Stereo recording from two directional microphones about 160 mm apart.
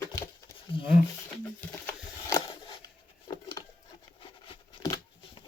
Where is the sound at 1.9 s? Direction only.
20° left (ahead or behind).